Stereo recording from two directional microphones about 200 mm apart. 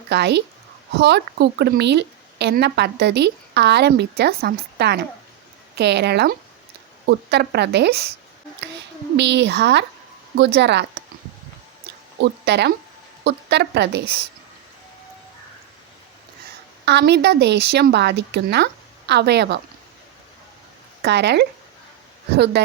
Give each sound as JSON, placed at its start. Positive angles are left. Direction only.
{"t": 0.1, "sound": "a woman's voice", "side_deg": -55}
{"t": 9.1, "sound": "a woman's voice", "side_deg": -60}
{"t": 12.2, "sound": "a woman's voice", "side_deg": -60}
{"t": 16.8, "sound": "a woman's voice", "side_deg": -60}
{"t": 21.0, "sound": "a woman's voice", "side_deg": -60}
{"t": 22.6, "sound": "a woman's voice", "side_deg": -55}